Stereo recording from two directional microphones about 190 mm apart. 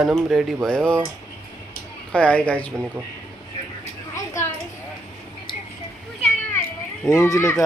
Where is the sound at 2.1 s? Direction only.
5° left (ahead or behind).